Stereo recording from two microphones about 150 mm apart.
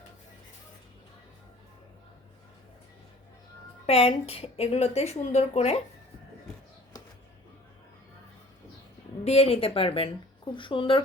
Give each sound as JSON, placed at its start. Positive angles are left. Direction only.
{"t": 3.8, "sound": "a woman's voice", "side_deg": 40}
{"t": 9.2, "sound": "speech", "side_deg": 45}